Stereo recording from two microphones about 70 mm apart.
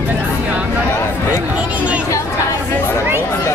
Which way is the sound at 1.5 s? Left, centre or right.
Centre.